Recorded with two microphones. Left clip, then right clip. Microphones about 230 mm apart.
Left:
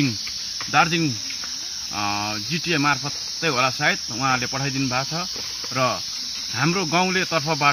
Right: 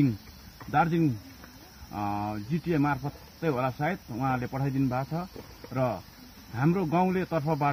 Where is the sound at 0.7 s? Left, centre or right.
Centre.